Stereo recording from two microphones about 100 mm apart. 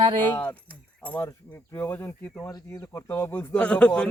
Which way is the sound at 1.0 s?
20° left (ahead or behind).